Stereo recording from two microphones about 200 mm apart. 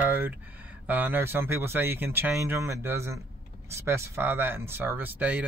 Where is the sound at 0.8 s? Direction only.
10° right (ahead or behind).